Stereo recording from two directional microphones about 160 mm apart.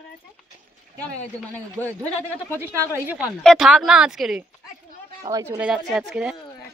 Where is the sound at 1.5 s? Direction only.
10° left (ahead or behind).